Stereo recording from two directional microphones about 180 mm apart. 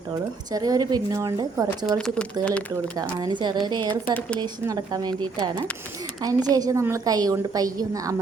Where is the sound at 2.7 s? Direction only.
20° right (ahead or behind).